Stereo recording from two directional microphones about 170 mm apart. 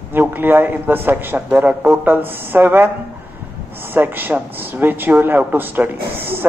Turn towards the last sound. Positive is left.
turn(degrees=-10)  # may be behind; listen again after turning